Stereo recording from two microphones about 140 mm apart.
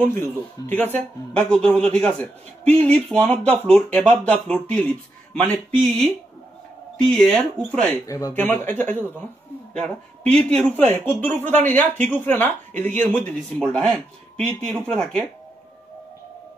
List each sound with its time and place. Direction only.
0.0 s speech: 15° left (ahead or behind)
8.1 s speech: 25° left (ahead or behind)
8.4 s speech: 15° left (ahead or behind)